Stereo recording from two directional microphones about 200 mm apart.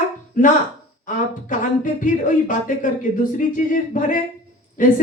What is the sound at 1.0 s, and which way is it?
Speech, 40° left (ahead or behind).